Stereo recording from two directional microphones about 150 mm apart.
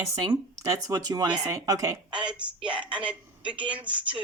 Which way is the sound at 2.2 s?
5° right (ahead or behind).